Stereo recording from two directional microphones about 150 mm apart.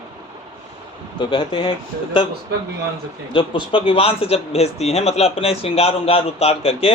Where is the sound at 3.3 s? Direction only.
35° left (ahead or behind).